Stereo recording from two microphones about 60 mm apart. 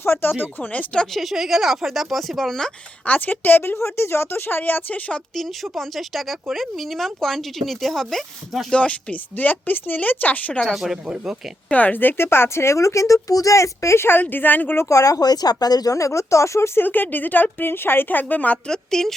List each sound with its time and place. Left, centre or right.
0.0 s a woman's voice: left
1.1 s speech: centre
3.1 s a woman's voice: left
3.8 s a woman's voice: left
5.7 s speech: centre
8.7 s speech: centre
11.0 s speech: centre
11.7 s a woman's voice: left
13.2 s speech: left
14.2 s a woman's voice: left
14.8 s speech: left
16.8 s a woman's voice: left
18.7 s a woman's voice: centre